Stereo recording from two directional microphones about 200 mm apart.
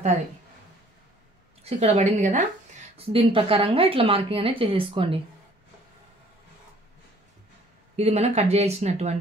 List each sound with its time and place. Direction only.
1.6 s speech: 35° right (ahead or behind)
3.1 s speech: 25° right (ahead or behind)
7.9 s speech: 30° right (ahead or behind)